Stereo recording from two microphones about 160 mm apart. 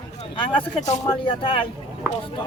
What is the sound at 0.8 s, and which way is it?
Speech, 50° left (ahead or behind).